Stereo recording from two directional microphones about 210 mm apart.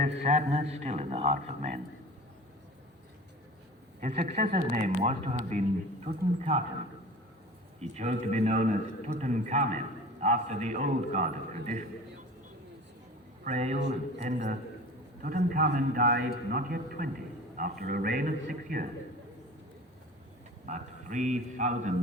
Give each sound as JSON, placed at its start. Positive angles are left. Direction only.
{"t": 0.0, "sound": "a man's voice", "side_deg": -35}
{"t": 4.0, "sound": "a man's voice", "side_deg": -35}
{"t": 7.8, "sound": "a man's voice", "side_deg": -30}
{"t": 13.4, "sound": "a man's voice", "side_deg": -35}
{"t": 20.7, "sound": "a man's voice", "side_deg": -35}